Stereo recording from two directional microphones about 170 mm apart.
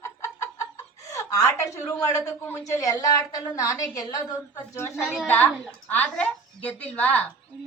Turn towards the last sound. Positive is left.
turn(degrees=10)  # may be behind; listen again after turning